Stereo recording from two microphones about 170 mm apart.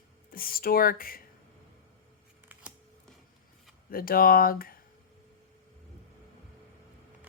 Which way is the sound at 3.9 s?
60° left (ahead or behind).